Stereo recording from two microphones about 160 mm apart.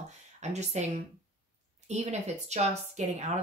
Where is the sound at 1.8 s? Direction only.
45° right (ahead or behind).